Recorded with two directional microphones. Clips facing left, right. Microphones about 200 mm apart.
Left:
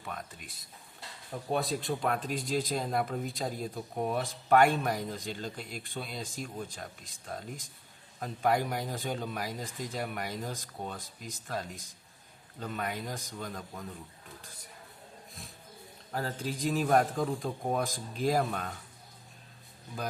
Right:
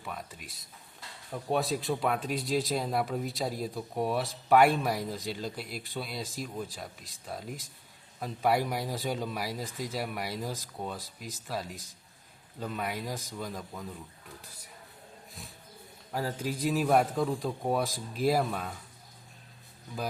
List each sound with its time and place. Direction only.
0.0 s speech: 5° right (ahead or behind)
16.1 s speech: 10° right (ahead or behind)